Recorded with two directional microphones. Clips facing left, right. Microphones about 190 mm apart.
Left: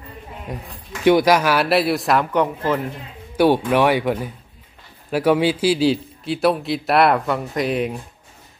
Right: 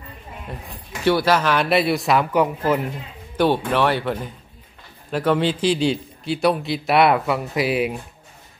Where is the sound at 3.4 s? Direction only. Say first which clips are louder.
Left 3 dB; 10° left (ahead or behind).